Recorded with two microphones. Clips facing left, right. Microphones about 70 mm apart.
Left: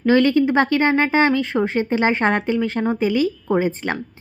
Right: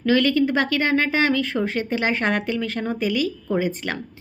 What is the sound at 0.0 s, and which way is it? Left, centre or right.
A woman's voice, left.